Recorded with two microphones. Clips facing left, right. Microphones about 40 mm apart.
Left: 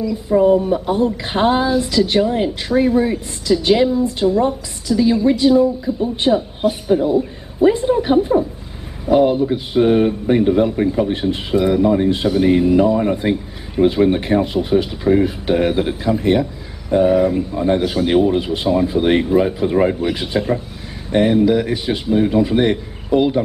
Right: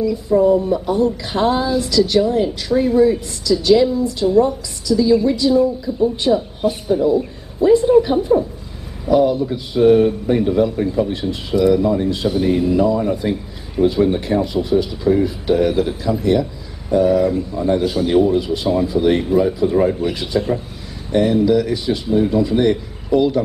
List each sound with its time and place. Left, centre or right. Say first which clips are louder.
0.4 s a man's voice: left 2 dB; left